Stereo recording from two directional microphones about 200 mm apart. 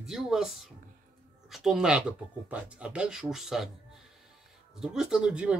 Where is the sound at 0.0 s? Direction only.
Centre (ahead or behind).